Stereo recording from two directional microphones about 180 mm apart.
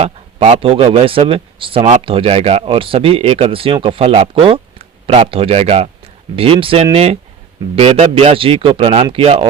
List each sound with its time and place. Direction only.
0.0 s speech: 35° right (ahead or behind)